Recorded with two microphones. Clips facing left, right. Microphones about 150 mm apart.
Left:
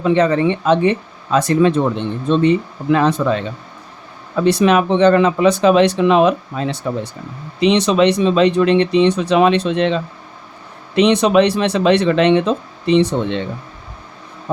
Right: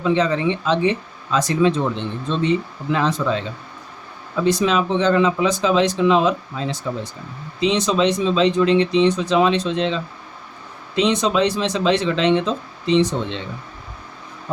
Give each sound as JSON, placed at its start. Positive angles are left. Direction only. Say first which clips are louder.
{"t": 0.0, "sound": "speech", "louder": "left 4 dB", "side_deg": 55}
{"t": 4.4, "sound": "speech", "louder": "left 5 dB", "side_deg": 65}